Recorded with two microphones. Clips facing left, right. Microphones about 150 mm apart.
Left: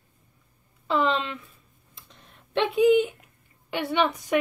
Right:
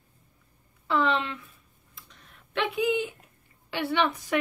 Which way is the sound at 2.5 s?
25° left (ahead or behind).